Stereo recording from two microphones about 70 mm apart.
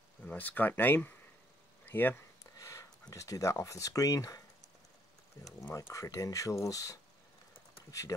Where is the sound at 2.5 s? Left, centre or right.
Left.